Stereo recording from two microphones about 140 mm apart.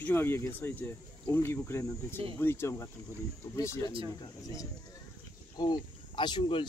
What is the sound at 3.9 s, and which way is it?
Speech, 40° right (ahead or behind).